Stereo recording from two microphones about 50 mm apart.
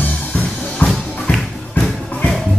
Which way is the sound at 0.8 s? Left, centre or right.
Left.